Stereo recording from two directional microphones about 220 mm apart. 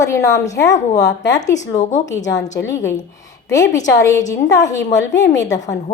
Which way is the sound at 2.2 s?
15° left (ahead or behind).